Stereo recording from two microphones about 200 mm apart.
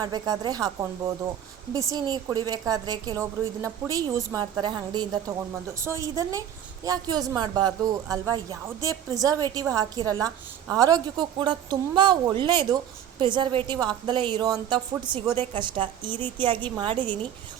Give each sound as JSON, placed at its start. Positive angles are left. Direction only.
{"t": 0.0, "sound": "a woman's voice", "side_deg": -20}